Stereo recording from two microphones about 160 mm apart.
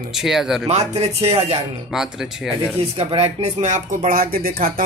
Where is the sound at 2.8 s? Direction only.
40° right (ahead or behind).